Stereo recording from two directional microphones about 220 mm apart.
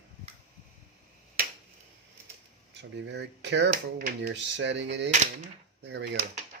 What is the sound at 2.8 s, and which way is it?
Speech, 55° right (ahead or behind).